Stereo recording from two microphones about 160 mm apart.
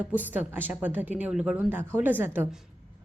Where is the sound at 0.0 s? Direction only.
10° right (ahead or behind).